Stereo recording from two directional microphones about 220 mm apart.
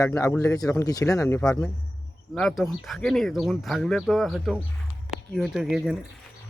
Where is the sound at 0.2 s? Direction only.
15° left (ahead or behind); by 6.0 s centre (ahead or behind).